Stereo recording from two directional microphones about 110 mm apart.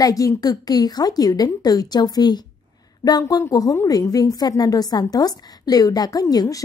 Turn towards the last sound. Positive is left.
turn(degrees=35)  # may be behind; listen again after turning